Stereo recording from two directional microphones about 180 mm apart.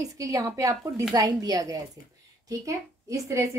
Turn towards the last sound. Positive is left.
turn(degrees=-15)  # may be behind; listen again after turning